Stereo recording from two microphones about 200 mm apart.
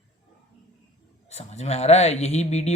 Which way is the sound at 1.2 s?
35° left (ahead or behind).